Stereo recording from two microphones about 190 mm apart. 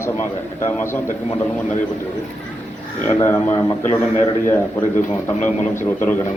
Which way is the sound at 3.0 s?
10° left (ahead or behind).